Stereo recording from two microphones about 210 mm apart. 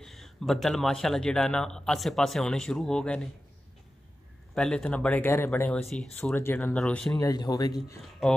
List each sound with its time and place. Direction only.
0.0 s a man's voice: centre (ahead or behind)
4.6 s a man's voice: 5° left (ahead or behind)
7.2 s speech: 15° left (ahead or behind)
8.0 s a man's voice: 5° left (ahead or behind)